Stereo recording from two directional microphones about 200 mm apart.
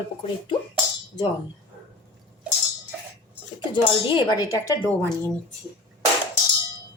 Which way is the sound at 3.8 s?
25° left (ahead or behind).